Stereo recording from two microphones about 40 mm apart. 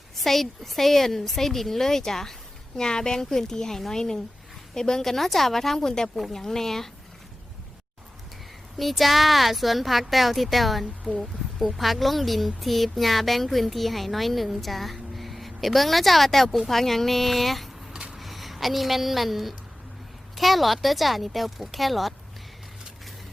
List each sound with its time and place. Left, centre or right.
0.2 s a woman's voice: centre
8.8 s speech: centre
17.9 s vehicle: right
18.2 s a woman's voice: centre